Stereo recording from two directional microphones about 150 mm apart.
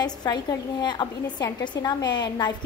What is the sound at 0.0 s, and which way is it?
A woman's voice, 25° left (ahead or behind).